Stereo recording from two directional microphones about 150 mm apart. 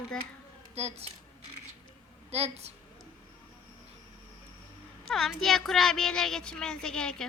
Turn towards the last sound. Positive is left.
turn(degrees=5)  # may be behind; listen again after turning